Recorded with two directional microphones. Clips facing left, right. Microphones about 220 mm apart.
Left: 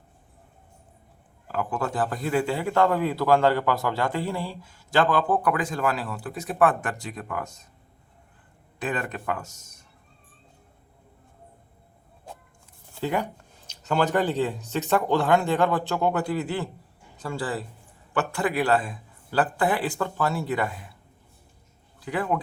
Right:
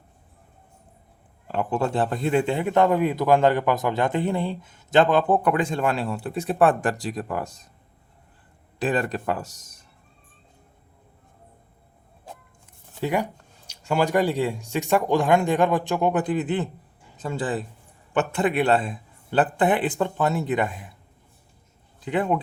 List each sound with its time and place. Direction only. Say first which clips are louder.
1.5 s a man's voice: right 4 dB; 30° right (ahead or behind)
8.8 s speech: right 5 dB; 30° right (ahead or behind)
13.0 s a man's voice: right 2 dB; 15° right (ahead or behind)
22.0 s a man's voice: right 3 dB; 20° right (ahead or behind)